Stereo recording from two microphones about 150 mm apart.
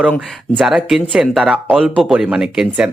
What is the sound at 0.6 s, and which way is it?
Speech, centre (ahead or behind).